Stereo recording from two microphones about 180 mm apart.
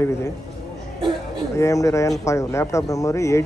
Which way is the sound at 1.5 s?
15° left (ahead or behind).